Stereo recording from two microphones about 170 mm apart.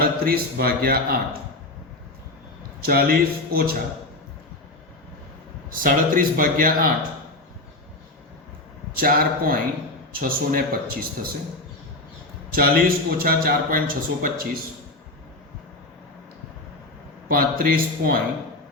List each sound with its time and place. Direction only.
0.0 s a man's voice: 65° right (ahead or behind)
2.8 s a man's voice: 60° right (ahead or behind)
5.7 s a man's voice: 55° right (ahead or behind)
9.0 s a man's voice: 60° right (ahead or behind)
12.5 s a man's voice: 60° right (ahead or behind)
17.2 s a man's voice: 55° right (ahead or behind)